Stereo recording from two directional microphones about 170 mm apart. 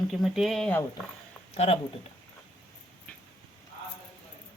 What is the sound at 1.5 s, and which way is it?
Speech, 40° left (ahead or behind).